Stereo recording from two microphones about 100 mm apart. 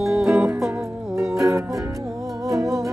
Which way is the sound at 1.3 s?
30° right (ahead or behind).